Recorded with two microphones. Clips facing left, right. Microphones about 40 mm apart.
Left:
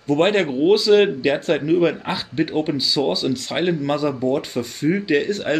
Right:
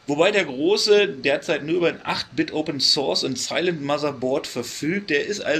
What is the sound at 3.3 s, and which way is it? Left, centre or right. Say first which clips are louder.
Speech: left 2 dB; centre.